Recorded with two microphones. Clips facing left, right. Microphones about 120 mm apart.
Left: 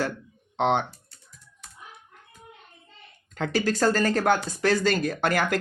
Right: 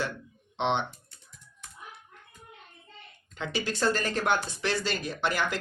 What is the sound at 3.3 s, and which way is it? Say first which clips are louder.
Speech: left 7 dB; 45° left (ahead or behind).